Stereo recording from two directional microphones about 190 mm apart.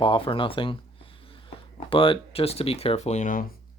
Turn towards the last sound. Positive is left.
turn(degrees=40)  # may be behind; listen again after turning